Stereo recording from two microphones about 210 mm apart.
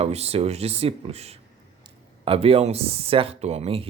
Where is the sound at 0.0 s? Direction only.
30° right (ahead or behind).